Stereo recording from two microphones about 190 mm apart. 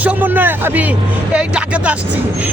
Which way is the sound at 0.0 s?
10° right (ahead or behind).